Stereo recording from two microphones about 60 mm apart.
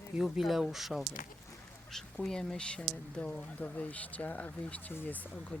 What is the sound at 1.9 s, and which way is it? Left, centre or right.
Speech, centre.